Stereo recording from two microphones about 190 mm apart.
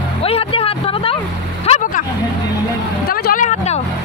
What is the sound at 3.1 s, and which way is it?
Vehicle, 50° left (ahead or behind).